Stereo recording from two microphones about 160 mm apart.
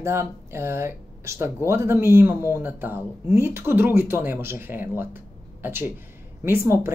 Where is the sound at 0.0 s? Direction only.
15° right (ahead or behind).